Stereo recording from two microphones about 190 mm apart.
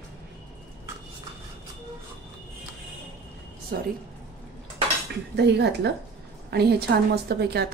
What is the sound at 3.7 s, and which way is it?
Speech, 60° right (ahead or behind).